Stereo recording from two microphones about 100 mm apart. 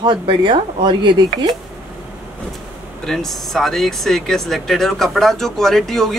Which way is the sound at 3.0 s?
5° left (ahead or behind).